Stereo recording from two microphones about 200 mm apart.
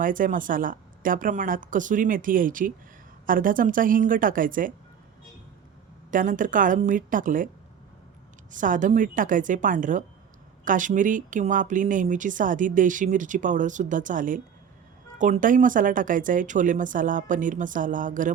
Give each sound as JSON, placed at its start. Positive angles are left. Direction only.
{"t": 0.0, "sound": "a woman's voice", "side_deg": -40}
{"t": 6.1, "sound": "speech", "side_deg": -40}
{"t": 8.5, "sound": "speech", "side_deg": -40}